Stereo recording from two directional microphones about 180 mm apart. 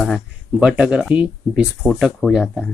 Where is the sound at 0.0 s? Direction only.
Centre (ahead or behind).